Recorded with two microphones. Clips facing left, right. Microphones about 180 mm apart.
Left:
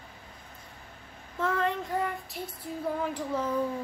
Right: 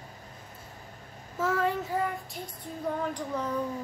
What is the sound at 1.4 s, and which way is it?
Child singing, 5° right (ahead or behind).